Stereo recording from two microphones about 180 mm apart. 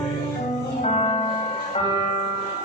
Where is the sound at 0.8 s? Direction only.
35° left (ahead or behind).